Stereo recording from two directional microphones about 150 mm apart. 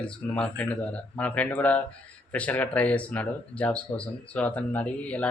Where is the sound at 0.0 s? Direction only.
5° left (ahead or behind).